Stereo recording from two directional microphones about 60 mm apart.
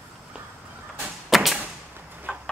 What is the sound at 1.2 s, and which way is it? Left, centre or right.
Arrow, centre.